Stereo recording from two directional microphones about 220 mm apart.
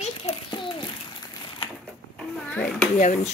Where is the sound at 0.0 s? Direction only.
25° left (ahead or behind).